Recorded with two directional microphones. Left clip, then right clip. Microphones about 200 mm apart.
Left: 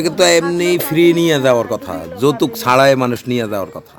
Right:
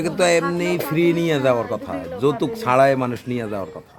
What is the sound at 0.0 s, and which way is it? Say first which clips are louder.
A man's voice: left 6 dB; 35° left (ahead or behind).